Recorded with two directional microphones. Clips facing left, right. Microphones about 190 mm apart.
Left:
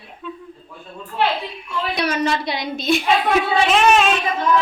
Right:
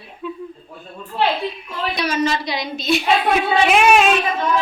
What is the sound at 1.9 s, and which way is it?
A woman's voice, 60° left (ahead or behind).